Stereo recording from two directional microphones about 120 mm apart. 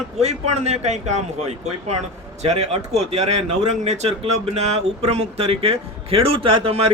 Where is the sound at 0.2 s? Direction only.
65° right (ahead or behind).